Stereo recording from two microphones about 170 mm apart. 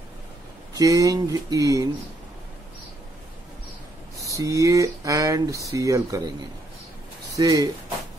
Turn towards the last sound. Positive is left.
turn(degrees=-20)  # may be behind; listen again after turning